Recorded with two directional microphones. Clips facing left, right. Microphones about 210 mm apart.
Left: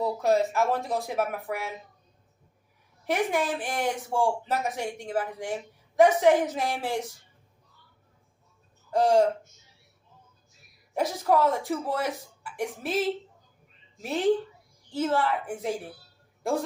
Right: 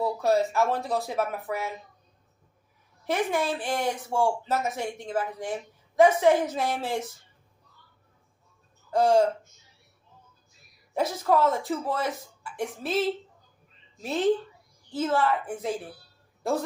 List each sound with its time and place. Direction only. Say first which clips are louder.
0.0 s speech: even; 15° left (ahead or behind)
3.1 s speech: even; 15° left (ahead or behind)
8.9 s speech: even; 15° left (ahead or behind)
10.9 s speech: even; 15° left (ahead or behind)